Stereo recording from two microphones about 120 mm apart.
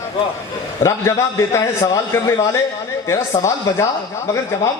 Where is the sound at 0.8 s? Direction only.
25° left (ahead or behind).